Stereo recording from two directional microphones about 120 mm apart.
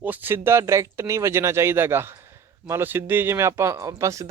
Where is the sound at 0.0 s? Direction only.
15° right (ahead or behind).